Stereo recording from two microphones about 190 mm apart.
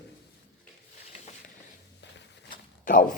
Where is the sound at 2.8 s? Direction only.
45° left (ahead or behind).